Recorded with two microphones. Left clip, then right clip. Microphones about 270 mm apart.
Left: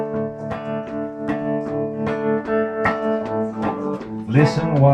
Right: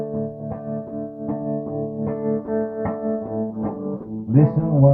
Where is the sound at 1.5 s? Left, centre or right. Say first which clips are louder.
Left 3 dB; left.